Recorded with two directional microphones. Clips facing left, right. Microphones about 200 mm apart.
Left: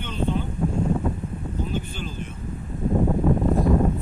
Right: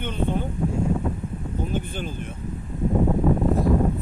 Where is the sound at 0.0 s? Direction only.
55° right (ahead or behind).